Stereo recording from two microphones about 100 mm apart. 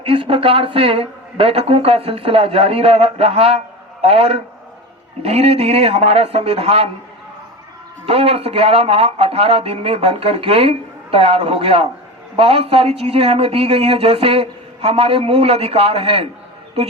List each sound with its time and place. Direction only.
0.0 s speech: 70° right (ahead or behind)
5.2 s a man's voice: 90° right; by 6.9 s 75° right (ahead or behind)
8.0 s speech: 85° right
12.4 s speech: 85° right; by 16.3 s 70° right (ahead or behind)